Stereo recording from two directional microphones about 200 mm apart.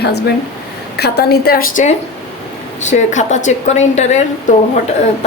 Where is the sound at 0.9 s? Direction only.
55° left (ahead or behind).